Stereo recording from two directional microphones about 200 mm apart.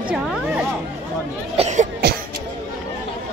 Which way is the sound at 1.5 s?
35° right (ahead or behind).